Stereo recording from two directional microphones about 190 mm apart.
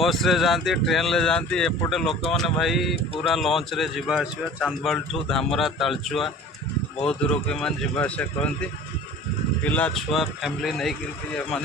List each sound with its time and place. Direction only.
0.0 s speech: centre (ahead or behind)
9.6 s speech: 5° left (ahead or behind)